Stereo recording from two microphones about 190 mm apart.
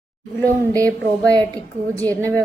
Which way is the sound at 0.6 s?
20° right (ahead or behind).